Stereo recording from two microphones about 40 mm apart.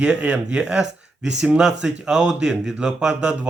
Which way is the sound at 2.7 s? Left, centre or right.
Right.